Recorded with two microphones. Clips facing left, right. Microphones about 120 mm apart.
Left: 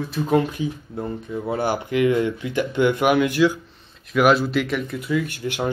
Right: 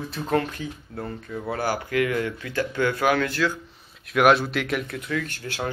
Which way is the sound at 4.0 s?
Centre (ahead or behind).